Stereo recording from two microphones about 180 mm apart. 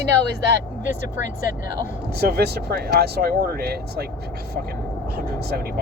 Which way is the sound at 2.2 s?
60° right (ahead or behind).